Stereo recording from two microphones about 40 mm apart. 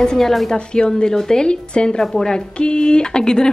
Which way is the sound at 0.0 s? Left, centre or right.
Centre.